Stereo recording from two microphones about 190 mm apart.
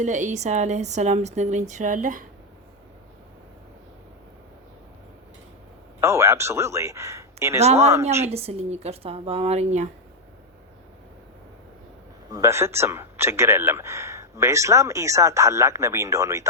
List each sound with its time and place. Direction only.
0.0 s speech: 40° right (ahead or behind)
6.0 s speech: 15° right (ahead or behind)
7.6 s speech: 35° right (ahead or behind)
12.3 s speech: 15° right (ahead or behind)